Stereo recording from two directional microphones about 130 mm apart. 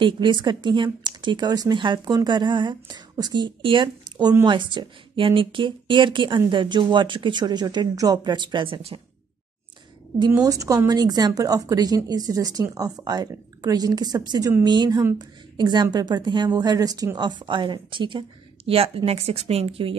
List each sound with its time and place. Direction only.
0.0 s speech: 35° right (ahead or behind)
10.4 s speech: 25° right (ahead or behind); by 20.0 s 45° right (ahead or behind)